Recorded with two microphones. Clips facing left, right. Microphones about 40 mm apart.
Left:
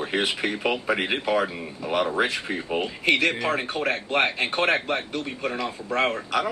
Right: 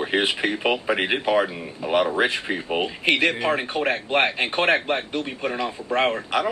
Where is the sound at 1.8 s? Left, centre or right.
Right.